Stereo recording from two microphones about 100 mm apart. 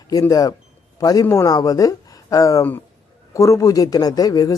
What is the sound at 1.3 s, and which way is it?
Speech, 30° left (ahead or behind).